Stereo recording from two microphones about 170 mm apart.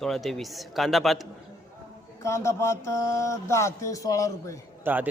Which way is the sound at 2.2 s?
15° left (ahead or behind).